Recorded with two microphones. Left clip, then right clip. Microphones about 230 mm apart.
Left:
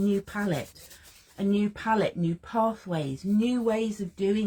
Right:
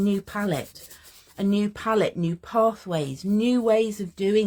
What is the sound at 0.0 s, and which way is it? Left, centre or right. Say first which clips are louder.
Speech: right 2 dB; right.